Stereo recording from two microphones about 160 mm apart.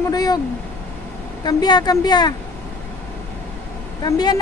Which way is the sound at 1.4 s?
25° left (ahead or behind).